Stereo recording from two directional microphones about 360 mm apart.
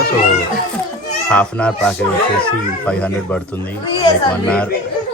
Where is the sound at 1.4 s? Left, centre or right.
Centre.